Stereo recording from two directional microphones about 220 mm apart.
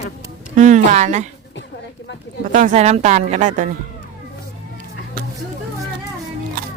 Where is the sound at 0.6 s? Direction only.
35° right (ahead or behind).